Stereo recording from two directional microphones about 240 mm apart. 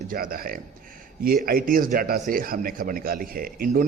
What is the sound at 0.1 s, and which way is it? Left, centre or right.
A man's voice, right.